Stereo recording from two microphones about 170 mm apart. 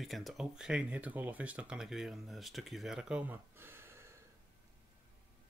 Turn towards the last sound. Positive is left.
turn(degrees=-15)  # may be behind; listen again after turning